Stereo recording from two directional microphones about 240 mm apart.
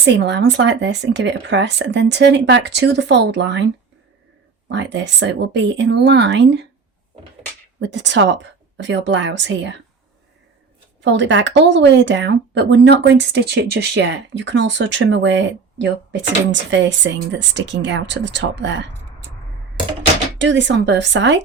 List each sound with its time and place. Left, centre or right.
0.0 s speech: right
4.7 s speech: right
7.8 s speech: right
11.0 s speech: right
20.4 s speech: right